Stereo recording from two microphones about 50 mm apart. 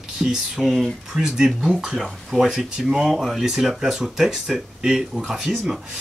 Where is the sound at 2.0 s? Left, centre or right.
Centre.